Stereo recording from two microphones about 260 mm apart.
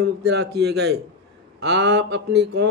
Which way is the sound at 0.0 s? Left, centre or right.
Right.